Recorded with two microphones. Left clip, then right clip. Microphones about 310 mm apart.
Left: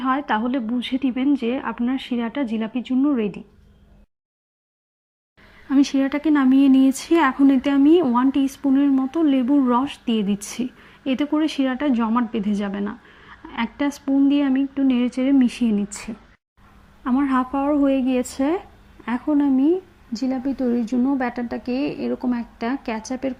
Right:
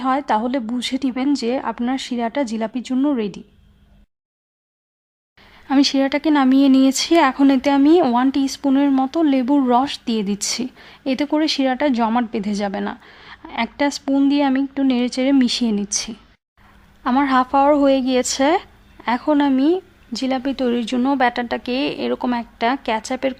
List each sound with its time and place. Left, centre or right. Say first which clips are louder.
0.0 s a woman's voice: right 3 dB; centre
5.6 s a woman's voice: right 3 dB; centre
17.0 s a woman's voice: right 5 dB; centre
19.5 s speech: right 2 dB; right
20.1 s a woman's voice: right 3 dB; right